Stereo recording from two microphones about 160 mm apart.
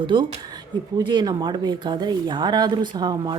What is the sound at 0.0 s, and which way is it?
Speech, 30° right (ahead or behind).